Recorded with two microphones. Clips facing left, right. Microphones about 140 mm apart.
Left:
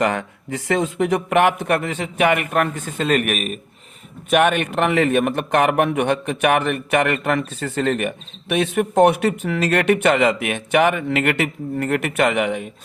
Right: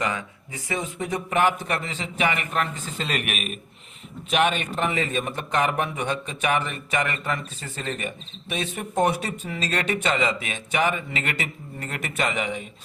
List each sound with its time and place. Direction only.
0.0 s a man's voice: 65° left (ahead or behind); by 3.6 s 40° left (ahead or behind)
4.3 s a man's voice: 55° left (ahead or behind)